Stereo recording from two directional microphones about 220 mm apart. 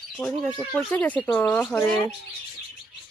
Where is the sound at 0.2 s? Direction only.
10° left (ahead or behind).